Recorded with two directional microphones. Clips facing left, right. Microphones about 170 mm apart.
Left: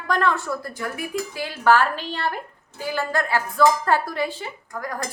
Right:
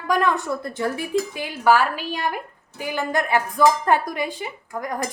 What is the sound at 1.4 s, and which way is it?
A woman's voice, 15° right (ahead or behind).